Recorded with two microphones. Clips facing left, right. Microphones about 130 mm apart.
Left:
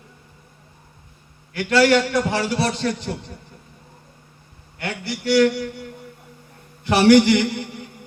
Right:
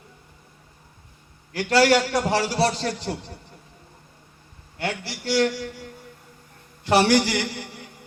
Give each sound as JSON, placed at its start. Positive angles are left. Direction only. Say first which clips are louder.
{"t": 1.5, "sound": "a man's voice", "louder": "left 2 dB", "side_deg": -35}
{"t": 4.8, "sound": "a man's voice", "louder": "left 1 dB", "side_deg": -30}
{"t": 6.8, "sound": "a man's voice", "louder": "left 5 dB", "side_deg": -35}